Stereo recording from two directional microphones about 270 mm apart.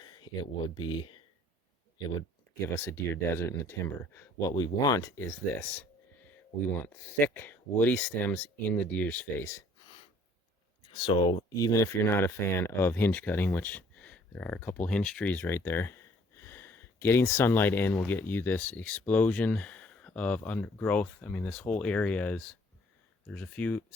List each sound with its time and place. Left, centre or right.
0.8 s speech: centre
2.7 s speech: centre
10.9 s speech: centre